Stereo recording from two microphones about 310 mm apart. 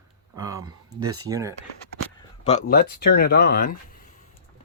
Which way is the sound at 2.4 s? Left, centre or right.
Left.